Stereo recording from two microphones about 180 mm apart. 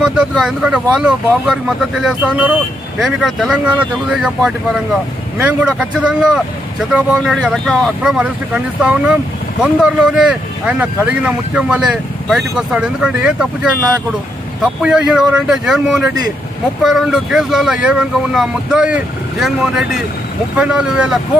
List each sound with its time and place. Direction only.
0.0 s speech: 5° right (ahead or behind)